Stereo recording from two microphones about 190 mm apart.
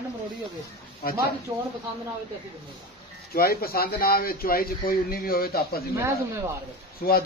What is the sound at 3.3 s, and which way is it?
A man's voice, 55° left (ahead or behind).